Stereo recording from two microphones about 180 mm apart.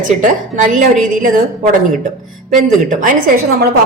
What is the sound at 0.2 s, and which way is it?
A woman's voice, 45° right (ahead or behind).